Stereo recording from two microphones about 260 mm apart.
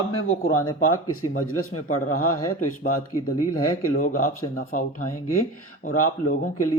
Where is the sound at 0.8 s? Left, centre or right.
Left.